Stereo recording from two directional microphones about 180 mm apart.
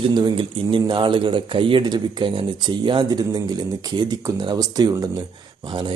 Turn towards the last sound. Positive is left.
turn(degrees=-25)  # may be behind; listen again after turning